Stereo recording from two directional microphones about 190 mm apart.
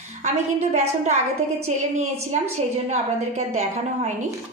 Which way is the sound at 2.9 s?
35° right (ahead or behind).